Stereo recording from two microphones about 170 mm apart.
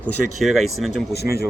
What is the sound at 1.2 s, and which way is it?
Speech, 65° left (ahead or behind).